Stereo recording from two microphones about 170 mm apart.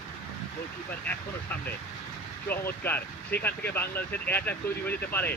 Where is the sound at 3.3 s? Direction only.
70° left (ahead or behind).